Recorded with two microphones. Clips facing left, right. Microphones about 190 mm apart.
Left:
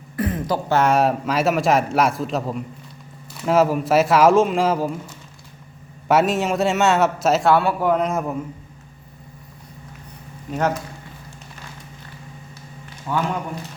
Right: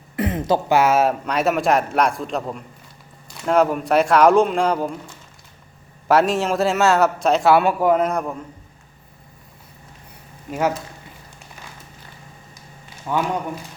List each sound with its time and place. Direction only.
0.2 s a sound: 20° right (ahead or behind)
0.7 s a man's voice: 5° right (ahead or behind)
6.1 s a man's voice: centre (ahead or behind)
7.5 s a man's voice: 15° right (ahead or behind)
13.1 s a man's voice: 15° right (ahead or behind)